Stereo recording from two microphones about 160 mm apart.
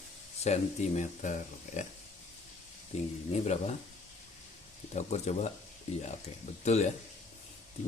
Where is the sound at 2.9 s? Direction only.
40° left (ahead or behind).